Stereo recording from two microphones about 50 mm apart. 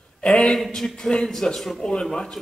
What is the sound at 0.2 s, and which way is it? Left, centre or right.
A man's voice, centre.